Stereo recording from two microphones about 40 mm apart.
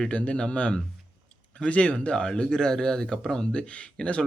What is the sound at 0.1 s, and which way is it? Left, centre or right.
Speech, left.